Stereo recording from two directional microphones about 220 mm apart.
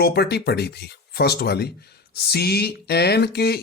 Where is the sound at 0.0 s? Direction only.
45° left (ahead or behind).